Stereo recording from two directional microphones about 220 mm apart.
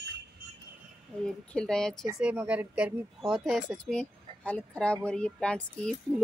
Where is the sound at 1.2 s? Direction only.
5° left (ahead or behind).